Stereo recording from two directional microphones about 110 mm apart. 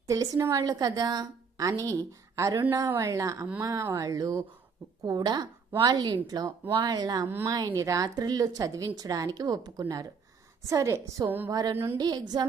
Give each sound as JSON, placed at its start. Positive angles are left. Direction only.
{"t": 0.1, "sound": "a woman's voice", "side_deg": -30}
{"t": 11.3, "sound": "a sound", "side_deg": -20}
{"t": 11.5, "sound": "speech", "side_deg": -30}
{"t": 11.9, "sound": "a woman's voice", "side_deg": -40}